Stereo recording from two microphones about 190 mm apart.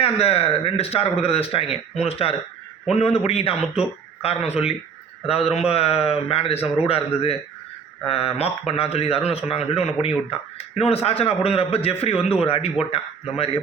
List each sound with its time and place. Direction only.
0.0 s speech: 30° left (ahead or behind)